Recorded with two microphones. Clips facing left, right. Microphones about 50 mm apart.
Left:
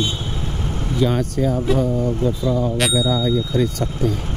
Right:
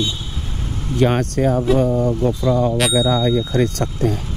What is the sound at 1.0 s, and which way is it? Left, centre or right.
Speech, right.